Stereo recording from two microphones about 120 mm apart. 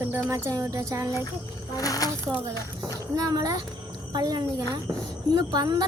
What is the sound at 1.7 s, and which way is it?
Speech, 30° left (ahead or behind).